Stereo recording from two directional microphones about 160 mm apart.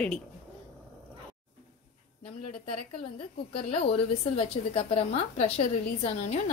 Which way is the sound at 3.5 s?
35° left (ahead or behind).